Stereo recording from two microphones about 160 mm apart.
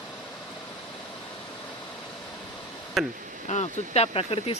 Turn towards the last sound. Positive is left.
turn(degrees=35)  # may be behind; listen again after turning